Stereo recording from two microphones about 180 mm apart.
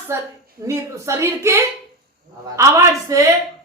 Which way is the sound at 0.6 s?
15° right (ahead or behind).